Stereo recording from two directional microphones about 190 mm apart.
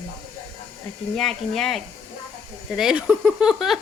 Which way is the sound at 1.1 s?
Centre (ahead or behind).